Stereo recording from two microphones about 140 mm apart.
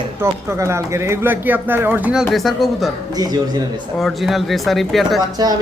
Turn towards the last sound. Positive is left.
turn(degrees=-30)  # may be behind; listen again after turning